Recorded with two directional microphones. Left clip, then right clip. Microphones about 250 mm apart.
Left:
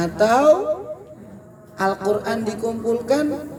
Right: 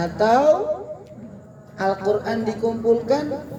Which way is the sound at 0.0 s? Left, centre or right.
Left.